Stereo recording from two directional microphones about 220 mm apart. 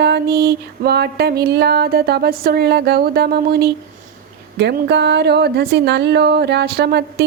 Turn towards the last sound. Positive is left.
turn(degrees=-50)  # may be behind; listen again after turning